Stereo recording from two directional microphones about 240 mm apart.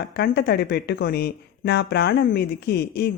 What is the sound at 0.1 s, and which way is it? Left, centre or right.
Speech, left.